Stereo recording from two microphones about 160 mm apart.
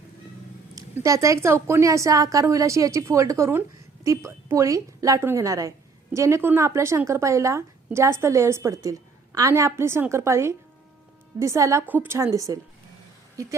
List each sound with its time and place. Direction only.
0.8 s a woman's voice: 20° right (ahead or behind)